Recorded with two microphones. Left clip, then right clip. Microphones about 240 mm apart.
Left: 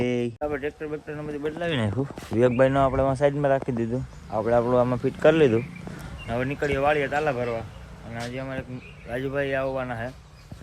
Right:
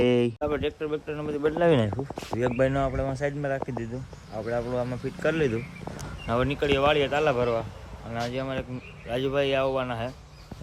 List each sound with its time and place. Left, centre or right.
0.3 s speech: centre
1.4 s speech: right
2.4 s speech: centre
6.2 s speech: centre